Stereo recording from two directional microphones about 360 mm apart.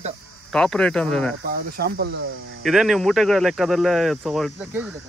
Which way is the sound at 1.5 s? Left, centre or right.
Right.